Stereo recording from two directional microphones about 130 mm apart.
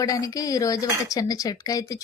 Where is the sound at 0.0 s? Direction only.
25° left (ahead or behind).